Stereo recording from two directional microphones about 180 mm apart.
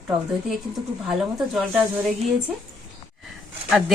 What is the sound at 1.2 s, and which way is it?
Speech, centre (ahead or behind).